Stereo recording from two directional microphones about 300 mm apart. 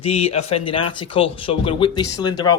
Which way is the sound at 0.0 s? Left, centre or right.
Centre.